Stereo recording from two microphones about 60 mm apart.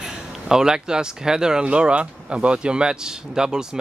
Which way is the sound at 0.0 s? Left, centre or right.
Centre.